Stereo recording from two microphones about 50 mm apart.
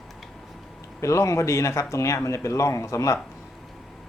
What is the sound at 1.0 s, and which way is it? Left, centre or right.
Speech, left.